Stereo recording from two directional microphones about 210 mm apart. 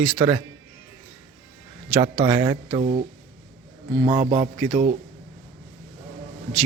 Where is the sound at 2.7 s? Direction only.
30° right (ahead or behind).